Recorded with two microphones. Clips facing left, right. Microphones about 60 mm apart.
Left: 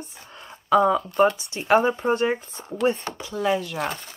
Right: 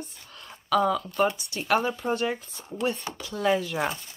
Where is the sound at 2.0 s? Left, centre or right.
Left.